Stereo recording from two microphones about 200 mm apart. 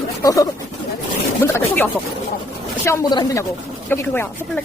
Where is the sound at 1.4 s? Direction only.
10° left (ahead or behind).